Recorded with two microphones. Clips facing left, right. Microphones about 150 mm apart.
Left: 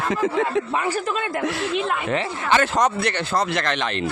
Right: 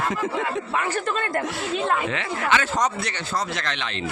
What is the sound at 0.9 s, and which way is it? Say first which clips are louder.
Speech: left 1 dB; 10° left (ahead or behind).